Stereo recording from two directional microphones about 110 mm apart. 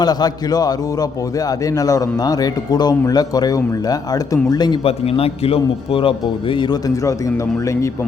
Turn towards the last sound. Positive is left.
turn(degrees=30)  # may be behind; listen again after turning